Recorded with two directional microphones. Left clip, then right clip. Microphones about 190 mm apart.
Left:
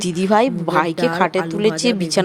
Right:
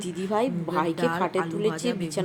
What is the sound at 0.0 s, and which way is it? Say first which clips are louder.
A woman's voice: left 10 dB; 25° left (ahead or behind).